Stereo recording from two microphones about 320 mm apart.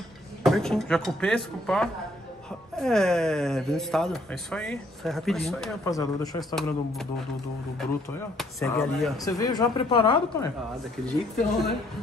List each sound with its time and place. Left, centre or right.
0.4 s speech: centre
8.4 s speech: centre
11.1 s speech: centre